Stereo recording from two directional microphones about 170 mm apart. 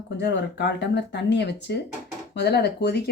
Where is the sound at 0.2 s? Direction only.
85° left.